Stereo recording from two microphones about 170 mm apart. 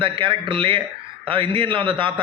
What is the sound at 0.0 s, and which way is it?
A man's voice, 30° right (ahead or behind).